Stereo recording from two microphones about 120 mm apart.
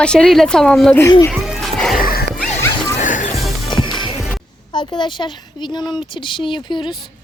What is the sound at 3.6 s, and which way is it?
Music, 40° left (ahead or behind).